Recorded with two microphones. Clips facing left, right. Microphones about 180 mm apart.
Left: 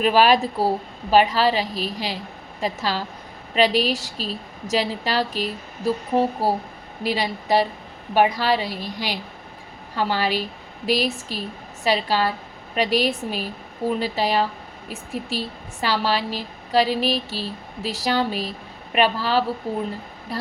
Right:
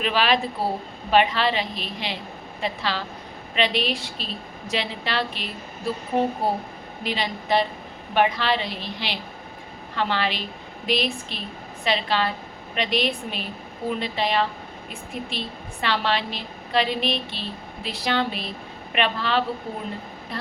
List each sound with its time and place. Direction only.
0.0 s a woman's voice: 40° left (ahead or behind)
9.9 s a woman's voice: 40° left (ahead or behind)